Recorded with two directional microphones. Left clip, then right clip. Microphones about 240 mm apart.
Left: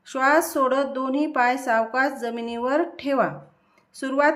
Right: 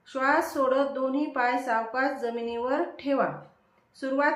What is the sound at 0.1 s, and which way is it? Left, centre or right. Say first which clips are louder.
A woman's voice: left 5 dB; left.